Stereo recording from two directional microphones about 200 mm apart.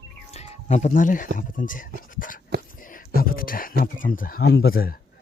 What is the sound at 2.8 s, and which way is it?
A man's voice, 45° left (ahead or behind).